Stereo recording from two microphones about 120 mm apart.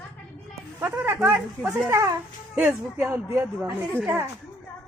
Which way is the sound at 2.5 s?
10° right (ahead or behind).